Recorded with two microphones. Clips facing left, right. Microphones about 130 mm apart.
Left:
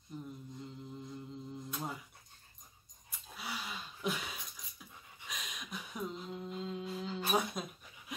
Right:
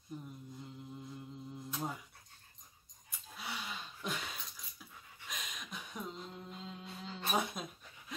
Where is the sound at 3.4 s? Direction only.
5° left (ahead or behind).